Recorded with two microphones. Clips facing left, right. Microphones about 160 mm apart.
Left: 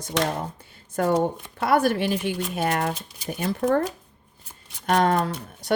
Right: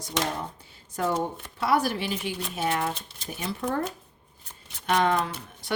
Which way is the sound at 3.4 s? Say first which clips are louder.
Left 7 dB; 50° left (ahead or behind).